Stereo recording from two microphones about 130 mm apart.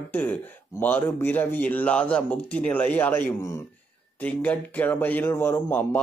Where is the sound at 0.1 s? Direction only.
15° left (ahead or behind).